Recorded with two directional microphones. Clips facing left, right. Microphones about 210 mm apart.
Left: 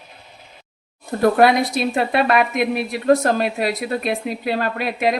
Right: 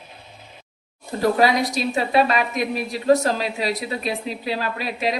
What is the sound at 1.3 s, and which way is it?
A woman's voice, 55° left (ahead or behind).